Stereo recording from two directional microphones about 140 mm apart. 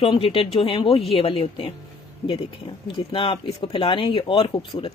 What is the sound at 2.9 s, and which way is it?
Speech, 35° left (ahead or behind).